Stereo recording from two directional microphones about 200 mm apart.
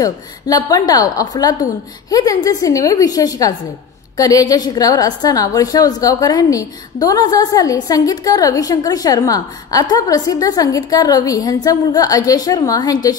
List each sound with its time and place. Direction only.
0.0 s a woman's voice: 20° left (ahead or behind)